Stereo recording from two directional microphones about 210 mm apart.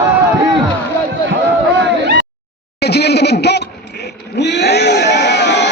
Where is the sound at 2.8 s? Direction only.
50° left (ahead or behind).